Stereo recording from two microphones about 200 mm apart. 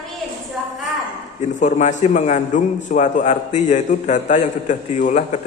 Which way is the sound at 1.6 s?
35° left (ahead or behind).